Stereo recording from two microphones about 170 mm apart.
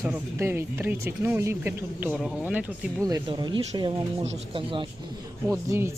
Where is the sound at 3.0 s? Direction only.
25° right (ahead or behind).